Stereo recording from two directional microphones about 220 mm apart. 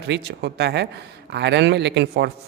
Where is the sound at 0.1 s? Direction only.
50° right (ahead or behind).